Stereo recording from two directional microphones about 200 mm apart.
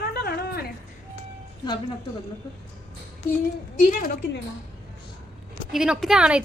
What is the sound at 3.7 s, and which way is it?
Speech, 45° left (ahead or behind).